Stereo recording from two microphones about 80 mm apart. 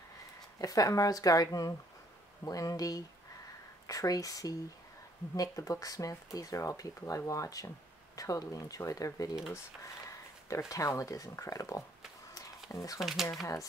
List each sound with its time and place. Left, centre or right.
0.6 s speech: left
10.7 s speech: left
13.0 s speech: centre